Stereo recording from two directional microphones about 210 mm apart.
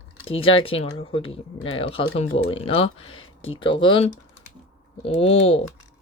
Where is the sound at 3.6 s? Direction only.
25° left (ahead or behind).